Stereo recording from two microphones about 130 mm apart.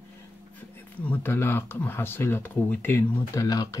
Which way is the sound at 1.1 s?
15° left (ahead or behind).